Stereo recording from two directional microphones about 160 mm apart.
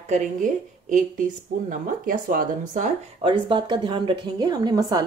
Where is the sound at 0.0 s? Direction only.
50° right (ahead or behind).